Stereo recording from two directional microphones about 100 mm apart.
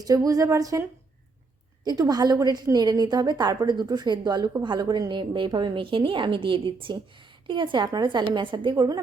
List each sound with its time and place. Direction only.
0.0 s a woman's voice: 40° right (ahead or behind)
1.8 s a woman's voice: 40° right (ahead or behind)